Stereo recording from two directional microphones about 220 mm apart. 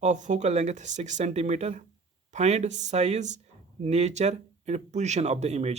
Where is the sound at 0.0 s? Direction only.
35° right (ahead or behind).